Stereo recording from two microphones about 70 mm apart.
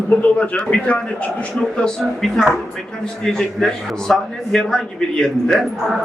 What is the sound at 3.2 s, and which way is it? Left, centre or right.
A man's voice, centre.